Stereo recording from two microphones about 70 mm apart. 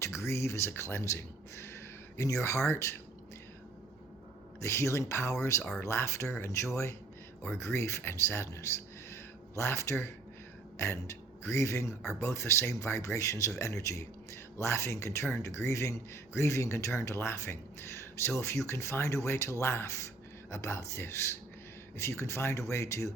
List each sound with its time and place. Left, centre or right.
0.0 s speech: left
4.6 s speech: left